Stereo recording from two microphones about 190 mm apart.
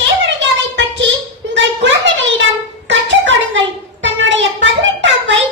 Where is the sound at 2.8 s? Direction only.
80° right.